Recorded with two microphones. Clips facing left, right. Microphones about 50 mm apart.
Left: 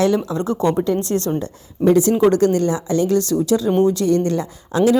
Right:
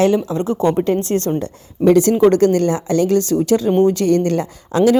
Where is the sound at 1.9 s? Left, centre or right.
Right.